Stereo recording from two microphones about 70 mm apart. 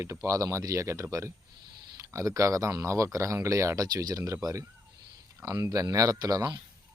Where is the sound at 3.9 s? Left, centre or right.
Right.